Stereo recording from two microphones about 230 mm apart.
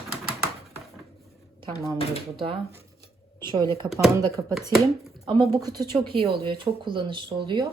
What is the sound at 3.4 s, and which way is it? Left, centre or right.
Speech, centre.